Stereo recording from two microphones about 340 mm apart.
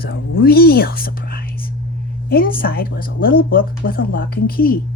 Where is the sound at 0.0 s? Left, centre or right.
Left.